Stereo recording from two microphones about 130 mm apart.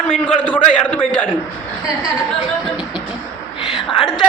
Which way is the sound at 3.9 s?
35° left (ahead or behind).